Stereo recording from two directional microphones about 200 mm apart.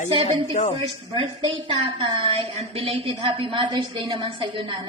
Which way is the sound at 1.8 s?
25° right (ahead or behind).